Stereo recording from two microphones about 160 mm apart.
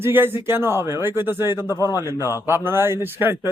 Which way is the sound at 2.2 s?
20° left (ahead or behind).